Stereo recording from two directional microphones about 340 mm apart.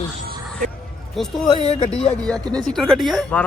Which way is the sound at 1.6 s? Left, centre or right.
Centre.